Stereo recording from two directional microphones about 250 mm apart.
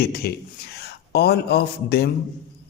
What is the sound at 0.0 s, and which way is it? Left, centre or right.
A man's voice, left.